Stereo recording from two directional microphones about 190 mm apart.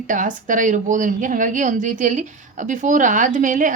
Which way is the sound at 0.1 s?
45° right (ahead or behind).